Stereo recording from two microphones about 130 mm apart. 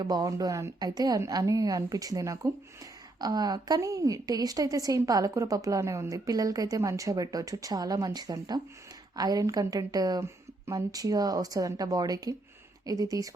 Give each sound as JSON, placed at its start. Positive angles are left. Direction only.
{"t": 0.0, "sound": "a woman's voice", "side_deg": -30}